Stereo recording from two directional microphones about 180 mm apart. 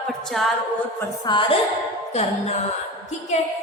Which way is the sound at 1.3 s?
25° left (ahead or behind).